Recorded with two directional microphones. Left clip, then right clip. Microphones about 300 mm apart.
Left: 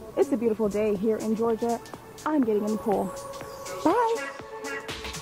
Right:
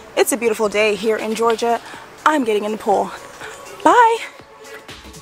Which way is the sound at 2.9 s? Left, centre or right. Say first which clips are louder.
Right 10 dB; right.